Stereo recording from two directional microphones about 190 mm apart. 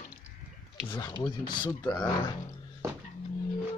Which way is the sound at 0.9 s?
20° left (ahead or behind).